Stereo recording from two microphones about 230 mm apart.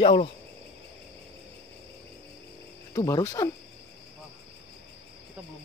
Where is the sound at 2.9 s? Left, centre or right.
Centre.